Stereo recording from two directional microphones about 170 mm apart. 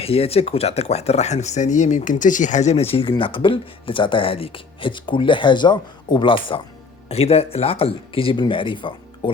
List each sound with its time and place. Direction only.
0.0 s speech: 35° left (ahead or behind)